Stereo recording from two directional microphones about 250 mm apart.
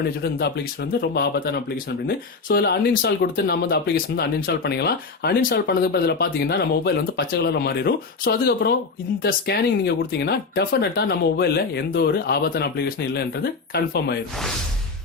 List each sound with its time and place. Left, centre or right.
0.2 s speech: left